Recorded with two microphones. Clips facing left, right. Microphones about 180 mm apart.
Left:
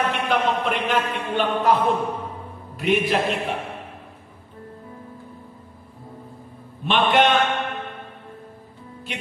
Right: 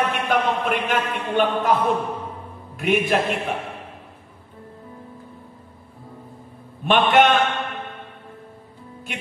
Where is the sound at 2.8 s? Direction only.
50° right (ahead or behind).